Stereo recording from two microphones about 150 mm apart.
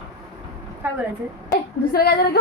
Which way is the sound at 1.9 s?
90° left.